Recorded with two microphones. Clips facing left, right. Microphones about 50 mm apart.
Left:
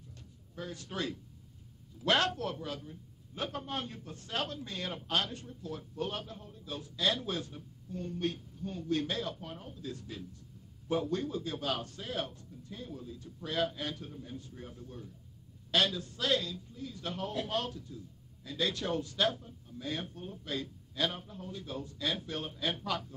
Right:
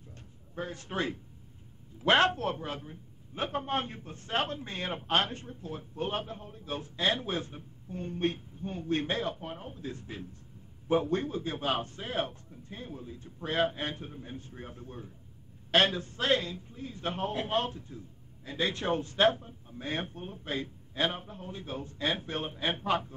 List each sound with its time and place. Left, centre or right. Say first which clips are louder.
0.6 s a man's voice: right 4 dB; right